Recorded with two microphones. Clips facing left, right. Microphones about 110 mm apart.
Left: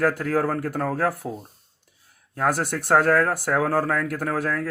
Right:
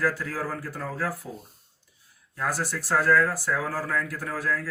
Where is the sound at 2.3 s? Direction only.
60° left (ahead or behind).